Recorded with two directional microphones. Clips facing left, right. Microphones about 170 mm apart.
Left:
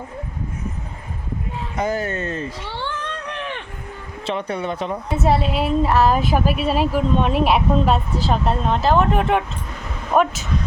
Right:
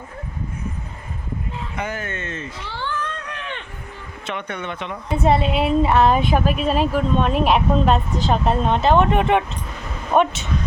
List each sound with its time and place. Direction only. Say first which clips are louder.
1.7 s speech: left 7 dB; 40° left (ahead or behind)
4.3 s speech: left 5 dB; 35° left (ahead or behind)
5.0 s a woman's voice: right 2 dB; 5° left (ahead or behind)